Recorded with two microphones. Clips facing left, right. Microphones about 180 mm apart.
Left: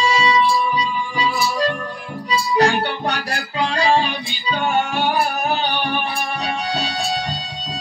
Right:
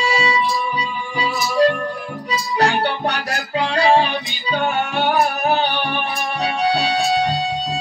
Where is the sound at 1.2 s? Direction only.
60° right (ahead or behind).